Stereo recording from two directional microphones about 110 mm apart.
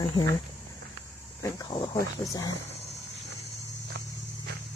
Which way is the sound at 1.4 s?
30° left (ahead or behind).